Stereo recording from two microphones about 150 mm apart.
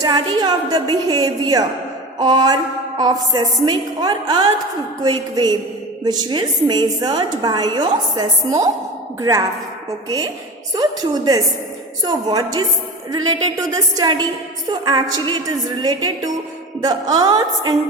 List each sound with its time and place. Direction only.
0.0 s a woman's voice: 30° right (ahead or behind)
10.8 s a woman's voice: 25° right (ahead or behind)